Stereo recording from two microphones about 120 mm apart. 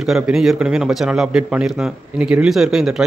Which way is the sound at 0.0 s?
5° right (ahead or behind).